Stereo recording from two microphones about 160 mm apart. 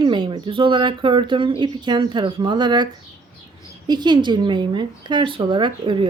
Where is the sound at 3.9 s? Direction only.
25° right (ahead or behind).